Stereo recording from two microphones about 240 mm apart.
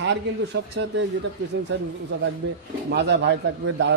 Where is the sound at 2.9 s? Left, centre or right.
Right.